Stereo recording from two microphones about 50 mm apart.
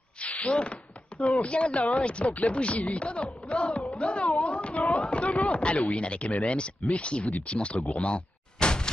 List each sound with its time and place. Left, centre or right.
0.2 s a sound: left
1.4 s speech: left
4.8 s chop: centre
5.8 s speech: left